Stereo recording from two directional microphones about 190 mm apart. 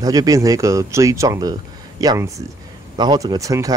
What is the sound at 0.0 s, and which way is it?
Speech, 20° right (ahead or behind).